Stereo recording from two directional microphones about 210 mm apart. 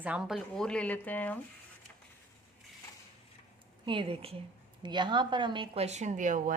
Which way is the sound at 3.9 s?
25° right (ahead or behind).